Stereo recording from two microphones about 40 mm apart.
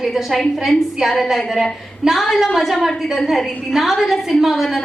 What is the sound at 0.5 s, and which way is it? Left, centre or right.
Speech, centre.